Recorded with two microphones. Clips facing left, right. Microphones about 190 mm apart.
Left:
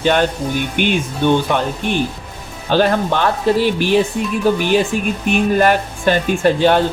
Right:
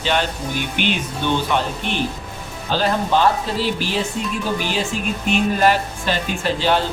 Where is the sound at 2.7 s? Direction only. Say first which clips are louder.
Left 4 dB; 60° left (ahead or behind).